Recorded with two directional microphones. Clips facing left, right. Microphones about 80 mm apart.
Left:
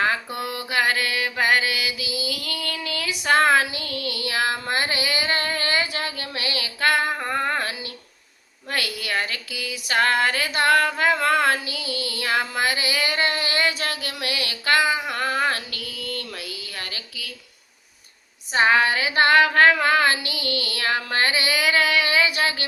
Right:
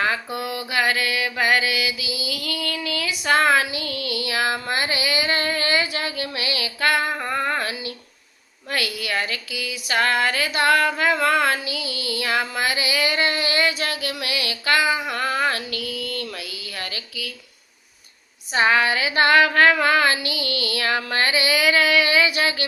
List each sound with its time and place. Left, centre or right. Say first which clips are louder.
0.3 s mantra: even; left
7.3 s female singing: even; left
8.7 s a sound: right 1 dB; left
15.1 s female singing: right 1 dB; left
18.5 s female singing: even; left